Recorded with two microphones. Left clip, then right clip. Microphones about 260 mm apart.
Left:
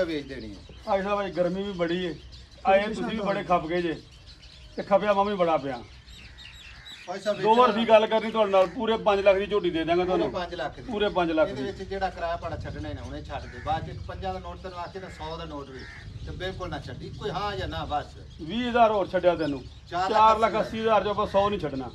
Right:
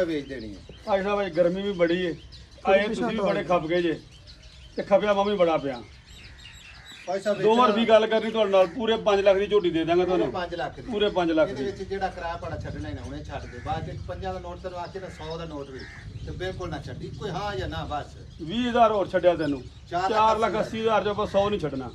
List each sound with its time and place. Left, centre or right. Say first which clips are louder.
0.0 s a man's voice: right 2 dB; left
2.9 s a man's voice: right 4 dB; centre
3.3 s speech: even; left
7.1 s speech: right 3 dB; centre
7.4 s a man's voice: even; left
10.3 s speech: right 1 dB; centre
10.9 s a man's voice: right 1 dB; left
11.5 s speech: right 2 dB; centre
16.3 s speech: right 1 dB; centre
18.5 s a man's voice: right 1 dB; left